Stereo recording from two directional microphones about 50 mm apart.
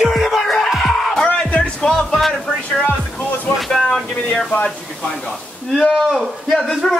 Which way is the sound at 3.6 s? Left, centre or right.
Centre.